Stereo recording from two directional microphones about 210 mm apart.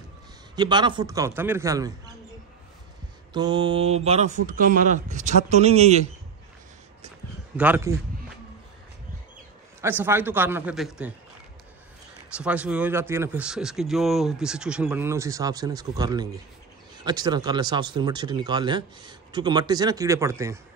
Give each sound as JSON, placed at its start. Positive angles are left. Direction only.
{"t": 0.6, "sound": "speech", "side_deg": -20}
{"t": 3.3, "sound": "speech", "side_deg": -20}
{"t": 7.5, "sound": "speech", "side_deg": -10}
{"t": 9.8, "sound": "speech", "side_deg": -10}
{"t": 12.4, "sound": "speech", "side_deg": -5}